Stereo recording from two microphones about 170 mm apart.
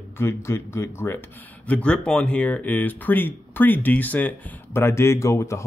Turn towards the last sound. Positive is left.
turn(degrees=15)  # may be behind; listen again after turning